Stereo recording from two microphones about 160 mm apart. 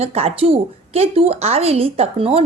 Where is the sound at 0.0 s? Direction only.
40° right (ahead or behind).